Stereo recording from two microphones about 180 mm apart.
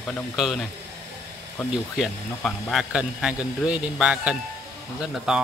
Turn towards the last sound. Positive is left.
turn(degrees=-5)  # may be behind; listen again after turning